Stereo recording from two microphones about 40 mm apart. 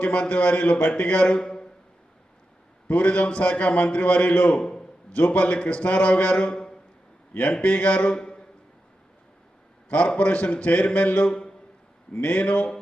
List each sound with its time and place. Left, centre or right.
0.0 s a man's voice: left
2.8 s a man's voice: left
4.6 s a sound: centre
5.1 s a man's voice: left
7.6 s a man's voice: left
8.1 s a sound: left
10.2 s a man's voice: left